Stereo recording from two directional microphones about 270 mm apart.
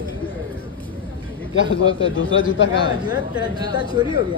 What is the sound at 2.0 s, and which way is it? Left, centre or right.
Speech, left.